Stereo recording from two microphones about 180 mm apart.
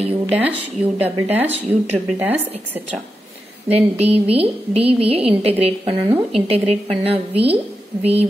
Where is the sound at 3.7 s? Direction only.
35° right (ahead or behind).